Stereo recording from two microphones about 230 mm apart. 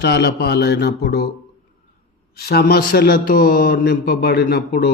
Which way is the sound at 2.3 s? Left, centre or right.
Left.